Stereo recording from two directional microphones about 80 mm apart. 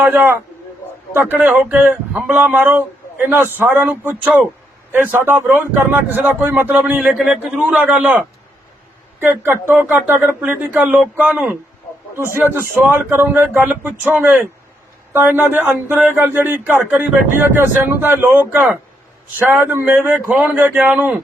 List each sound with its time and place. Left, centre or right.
0.0 s a man's voice: right
7.2 s a man's voice: centre
7.7 s a man's voice: centre
9.2 s a man's voice: right
12.1 s a man's voice: right